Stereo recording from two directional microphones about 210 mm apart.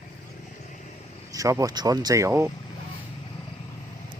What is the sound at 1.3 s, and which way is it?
Speech, 15° right (ahead or behind).